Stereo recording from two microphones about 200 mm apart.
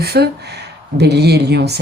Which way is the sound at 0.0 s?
50° right (ahead or behind).